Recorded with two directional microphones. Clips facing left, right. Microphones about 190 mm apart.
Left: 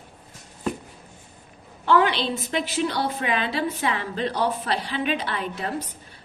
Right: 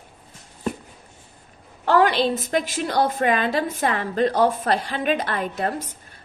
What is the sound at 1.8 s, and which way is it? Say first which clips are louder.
A woman's voice: right 3 dB; 45° right (ahead or behind).